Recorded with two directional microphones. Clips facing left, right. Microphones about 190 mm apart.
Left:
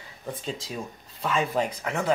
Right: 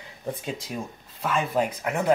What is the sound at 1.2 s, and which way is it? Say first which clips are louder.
Speech: right 1 dB; 5° right (ahead or behind).